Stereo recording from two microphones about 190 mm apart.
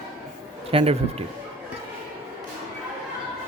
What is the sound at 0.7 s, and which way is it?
Speech, 30° right (ahead or behind).